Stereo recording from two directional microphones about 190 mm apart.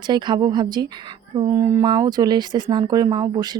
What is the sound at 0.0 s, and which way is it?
A woman's voice, 25° right (ahead or behind).